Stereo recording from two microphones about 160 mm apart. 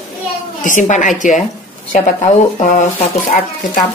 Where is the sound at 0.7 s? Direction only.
50° left (ahead or behind).